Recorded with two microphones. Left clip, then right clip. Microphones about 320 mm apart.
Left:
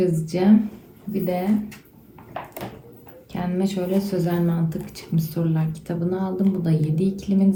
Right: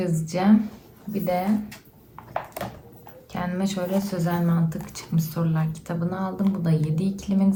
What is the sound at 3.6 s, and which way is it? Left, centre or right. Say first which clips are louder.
Speech: left 3 dB; centre.